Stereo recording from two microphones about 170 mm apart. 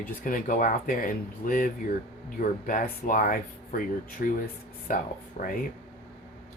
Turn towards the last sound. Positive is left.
turn(degrees=40)  # may be behind; listen again after turning